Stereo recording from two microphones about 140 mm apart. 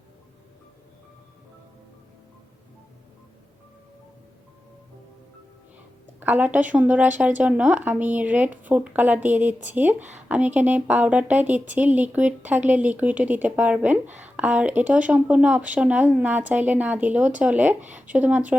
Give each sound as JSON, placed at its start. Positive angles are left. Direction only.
{"t": 6.1, "sound": "speech", "side_deg": -10}